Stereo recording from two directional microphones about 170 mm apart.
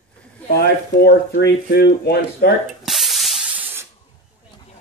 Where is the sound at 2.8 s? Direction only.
Centre (ahead or behind).